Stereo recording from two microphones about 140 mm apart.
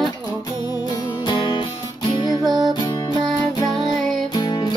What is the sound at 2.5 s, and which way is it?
Music, 30° right (ahead or behind).